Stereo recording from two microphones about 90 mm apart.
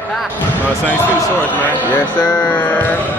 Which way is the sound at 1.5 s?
20° left (ahead or behind).